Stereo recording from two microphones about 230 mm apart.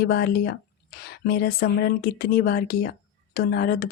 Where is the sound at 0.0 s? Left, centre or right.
Left.